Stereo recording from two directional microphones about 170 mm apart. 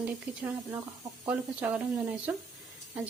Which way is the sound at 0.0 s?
10° right (ahead or behind).